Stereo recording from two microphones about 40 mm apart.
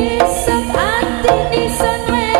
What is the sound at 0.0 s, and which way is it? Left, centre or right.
Music, centre.